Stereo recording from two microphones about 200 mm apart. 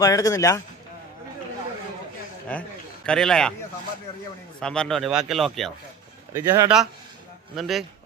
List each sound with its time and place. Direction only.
0.0 s speech: 15° left (ahead or behind)
2.5 s a man's voice: 5° left (ahead or behind)
4.6 s a man's voice: 5° left (ahead or behind)
6.3 s speech: 15° right (ahead or behind)
7.5 s a man's voice: centre (ahead or behind)